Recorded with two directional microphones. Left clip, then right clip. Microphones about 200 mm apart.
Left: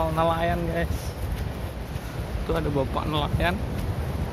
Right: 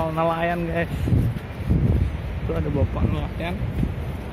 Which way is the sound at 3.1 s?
20° left (ahead or behind).